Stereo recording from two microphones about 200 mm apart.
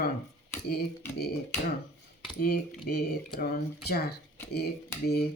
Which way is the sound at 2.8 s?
50° left (ahead or behind).